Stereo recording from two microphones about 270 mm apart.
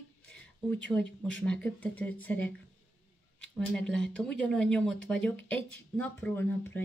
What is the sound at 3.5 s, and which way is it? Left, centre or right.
Speech, centre.